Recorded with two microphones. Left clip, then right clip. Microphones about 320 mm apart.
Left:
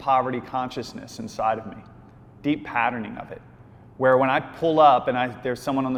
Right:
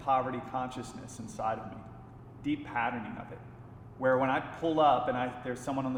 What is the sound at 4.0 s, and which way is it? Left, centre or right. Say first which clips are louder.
A man's voice: left 9 dB; left.